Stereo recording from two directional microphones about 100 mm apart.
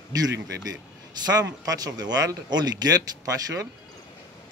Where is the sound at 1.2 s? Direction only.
40° right (ahead or behind).